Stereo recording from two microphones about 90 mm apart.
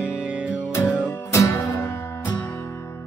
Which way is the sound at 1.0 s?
35° left (ahead or behind).